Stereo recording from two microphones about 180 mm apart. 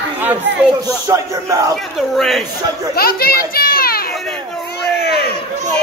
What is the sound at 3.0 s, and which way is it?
Children playing, 55° left (ahead or behind).